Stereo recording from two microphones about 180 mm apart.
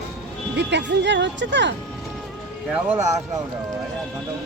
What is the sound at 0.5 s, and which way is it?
Speech, 75° right (ahead or behind).